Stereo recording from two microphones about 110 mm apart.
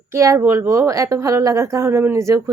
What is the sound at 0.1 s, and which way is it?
A woman's voice, 25° right (ahead or behind).